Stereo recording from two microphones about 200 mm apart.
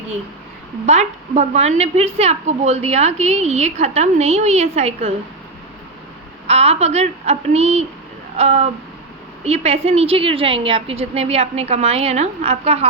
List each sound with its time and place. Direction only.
0.9 s a woman's voice: 35° right (ahead or behind)
6.5 s a woman's voice: 30° right (ahead or behind)